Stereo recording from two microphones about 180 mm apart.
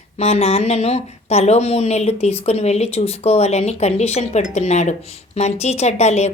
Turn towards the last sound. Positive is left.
turn(degrees=40)  # may be behind; listen again after turning